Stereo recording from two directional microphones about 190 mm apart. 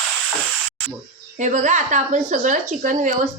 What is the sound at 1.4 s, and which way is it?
A woman's voice, 40° right (ahead or behind).